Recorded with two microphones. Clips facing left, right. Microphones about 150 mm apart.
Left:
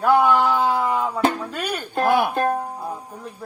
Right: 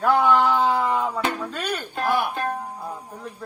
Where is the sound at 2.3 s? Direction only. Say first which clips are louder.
Left 6 dB; 45° left (ahead or behind).